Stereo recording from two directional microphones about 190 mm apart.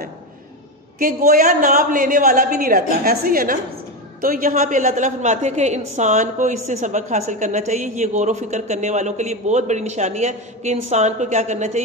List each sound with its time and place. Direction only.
0.9 s a woman's voice: 50° right (ahead or behind)